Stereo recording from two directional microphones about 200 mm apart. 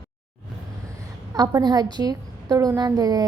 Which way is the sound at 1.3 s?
15° right (ahead or behind).